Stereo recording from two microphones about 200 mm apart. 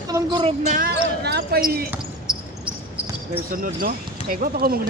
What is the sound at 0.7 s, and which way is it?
Speech, 45° right (ahead or behind).